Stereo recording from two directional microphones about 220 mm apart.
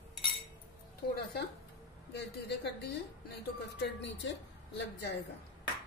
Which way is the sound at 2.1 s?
50° left (ahead or behind).